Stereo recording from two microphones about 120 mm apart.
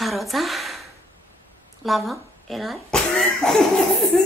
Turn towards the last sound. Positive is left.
turn(degrees=0)  # may be behind; listen again after turning